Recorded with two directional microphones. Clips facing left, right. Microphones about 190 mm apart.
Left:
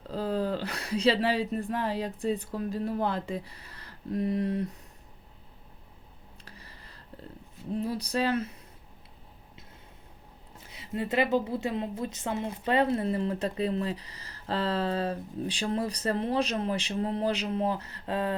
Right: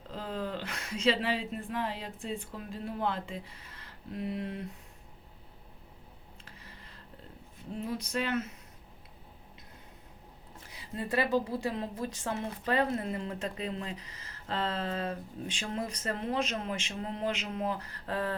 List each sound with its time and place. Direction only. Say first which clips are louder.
0.1 s speech: left 7 dB; 35° left (ahead or behind)
7.8 s a woman's voice: left 4 dB; 35° left (ahead or behind)
10.7 s a woman's voice: left 4 dB; 25° left (ahead or behind)